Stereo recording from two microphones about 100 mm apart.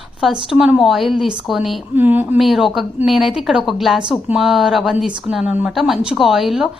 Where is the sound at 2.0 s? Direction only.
20° right (ahead or behind).